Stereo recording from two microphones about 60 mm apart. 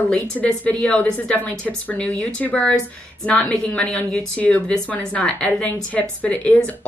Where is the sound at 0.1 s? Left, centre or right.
Left.